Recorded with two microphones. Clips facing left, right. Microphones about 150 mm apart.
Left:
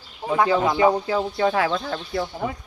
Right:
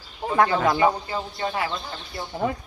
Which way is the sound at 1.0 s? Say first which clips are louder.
Left 7 dB; 90° left.